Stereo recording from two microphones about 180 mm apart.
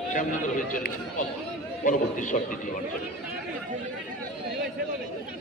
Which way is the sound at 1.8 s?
45° left (ahead or behind).